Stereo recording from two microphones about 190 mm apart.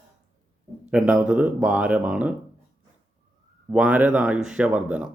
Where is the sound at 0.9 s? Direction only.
5° right (ahead or behind).